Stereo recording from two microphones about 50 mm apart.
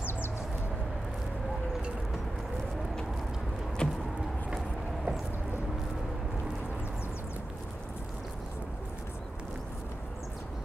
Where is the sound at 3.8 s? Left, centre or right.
Centre.